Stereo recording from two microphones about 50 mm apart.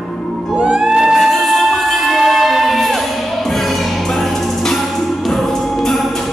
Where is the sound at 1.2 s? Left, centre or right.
Centre.